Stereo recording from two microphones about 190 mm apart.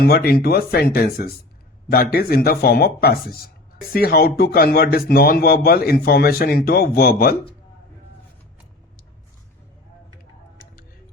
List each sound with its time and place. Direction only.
0.0 s speech: 55° left (ahead or behind)